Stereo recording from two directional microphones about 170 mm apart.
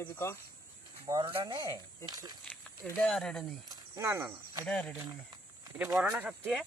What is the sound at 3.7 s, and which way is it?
Speech, 20° right (ahead or behind).